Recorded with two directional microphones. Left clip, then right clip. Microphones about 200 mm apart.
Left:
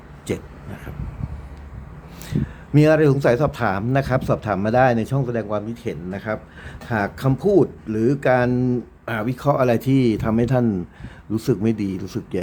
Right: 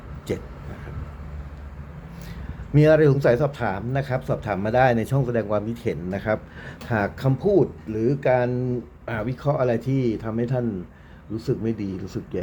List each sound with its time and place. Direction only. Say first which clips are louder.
0.3 s speech: left 2 dB; 15° left (ahead or behind)
2.7 s speech: left 1 dB; 10° left (ahead or behind)
7.3 s speech: left 3 dB; 15° left (ahead or behind)